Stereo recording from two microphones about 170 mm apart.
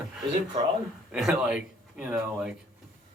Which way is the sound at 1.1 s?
5° right (ahead or behind).